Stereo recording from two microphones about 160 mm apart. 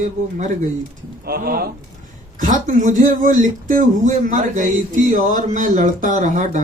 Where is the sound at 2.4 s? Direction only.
50° right (ahead or behind).